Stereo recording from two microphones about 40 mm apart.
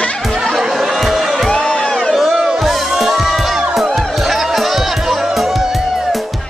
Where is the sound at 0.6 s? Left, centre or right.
Centre.